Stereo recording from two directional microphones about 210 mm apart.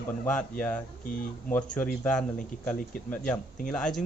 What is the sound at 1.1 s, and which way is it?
Speech, 40° left (ahead or behind).